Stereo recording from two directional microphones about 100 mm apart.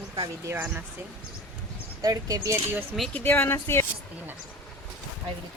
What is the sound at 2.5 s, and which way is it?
Speech, 20° right (ahead or behind).